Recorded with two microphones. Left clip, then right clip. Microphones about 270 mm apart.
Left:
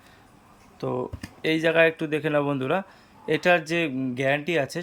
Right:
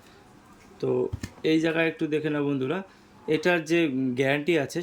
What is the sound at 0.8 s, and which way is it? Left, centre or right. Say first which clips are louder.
Speech: right 3 dB; centre.